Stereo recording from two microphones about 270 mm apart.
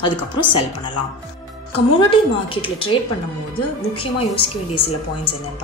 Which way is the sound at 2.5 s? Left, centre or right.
Centre.